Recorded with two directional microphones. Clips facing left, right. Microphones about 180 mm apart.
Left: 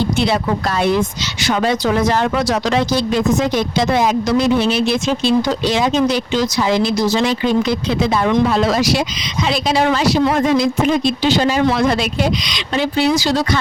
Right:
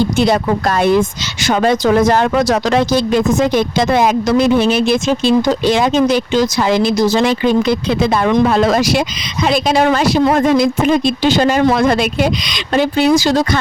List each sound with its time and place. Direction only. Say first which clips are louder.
0.2 s speech: right 4 dB; 45° right (ahead or behind)